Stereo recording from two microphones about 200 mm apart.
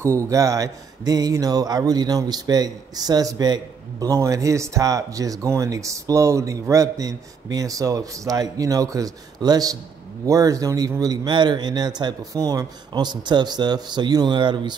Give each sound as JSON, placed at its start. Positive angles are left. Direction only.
{"t": 0.0, "sound": "speech", "side_deg": -15}